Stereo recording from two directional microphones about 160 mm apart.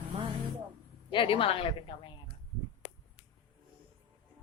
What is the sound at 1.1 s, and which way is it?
Speech, 35° left (ahead or behind).